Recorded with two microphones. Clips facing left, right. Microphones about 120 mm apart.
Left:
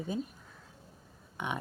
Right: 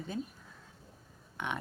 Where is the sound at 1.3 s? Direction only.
15° left (ahead or behind).